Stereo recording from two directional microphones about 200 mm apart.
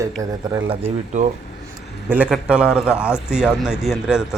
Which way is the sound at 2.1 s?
5° right (ahead or behind).